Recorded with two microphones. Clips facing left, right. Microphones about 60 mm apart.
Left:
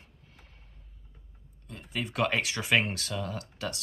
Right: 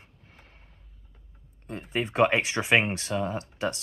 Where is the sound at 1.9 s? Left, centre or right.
Right.